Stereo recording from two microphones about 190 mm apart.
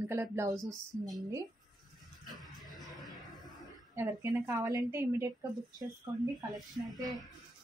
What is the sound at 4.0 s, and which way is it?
A woman's voice, 15° right (ahead or behind).